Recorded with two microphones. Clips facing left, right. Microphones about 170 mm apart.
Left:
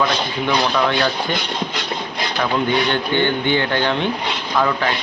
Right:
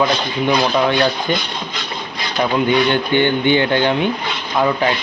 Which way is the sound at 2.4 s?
15° right (ahead or behind).